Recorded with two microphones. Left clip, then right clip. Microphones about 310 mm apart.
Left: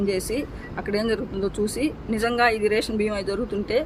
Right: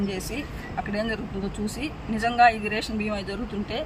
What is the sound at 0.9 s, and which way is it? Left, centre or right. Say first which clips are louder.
Speech: left 7 dB; centre.